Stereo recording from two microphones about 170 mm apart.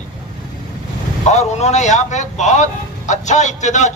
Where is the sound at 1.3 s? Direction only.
40° left (ahead or behind).